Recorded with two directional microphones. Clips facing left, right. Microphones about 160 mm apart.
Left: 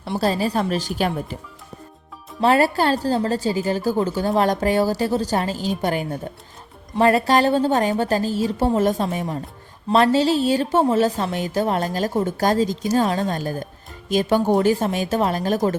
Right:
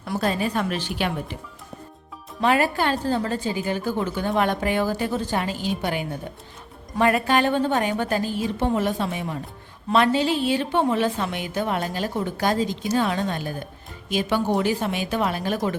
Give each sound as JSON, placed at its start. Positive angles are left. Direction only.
{"t": 0.0, "sound": "a woman's voice", "side_deg": 30}
{"t": 2.4, "sound": "a woman's voice", "side_deg": 35}